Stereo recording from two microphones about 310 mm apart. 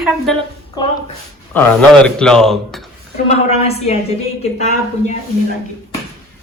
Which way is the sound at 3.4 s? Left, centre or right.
Centre.